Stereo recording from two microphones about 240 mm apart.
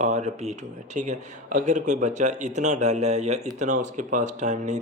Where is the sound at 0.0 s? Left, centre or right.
Right.